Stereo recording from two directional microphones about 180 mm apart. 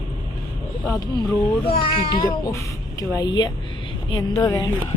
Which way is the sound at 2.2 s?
20° left (ahead or behind).